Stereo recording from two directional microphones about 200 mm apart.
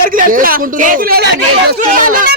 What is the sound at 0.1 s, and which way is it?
Speech, 45° right (ahead or behind).